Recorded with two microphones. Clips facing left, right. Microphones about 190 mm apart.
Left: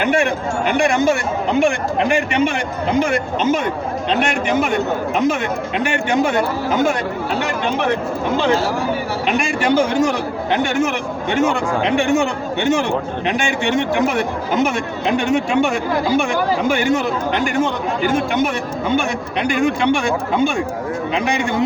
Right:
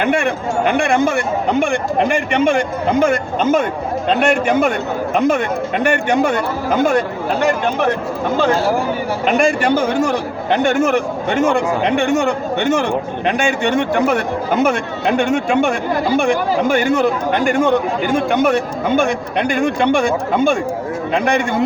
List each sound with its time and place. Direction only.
0.8 s speech: 55° right (ahead or behind)
9.2 s speech: 55° right (ahead or behind)